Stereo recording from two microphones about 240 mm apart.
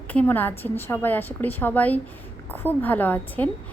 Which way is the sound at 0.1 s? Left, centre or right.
Centre.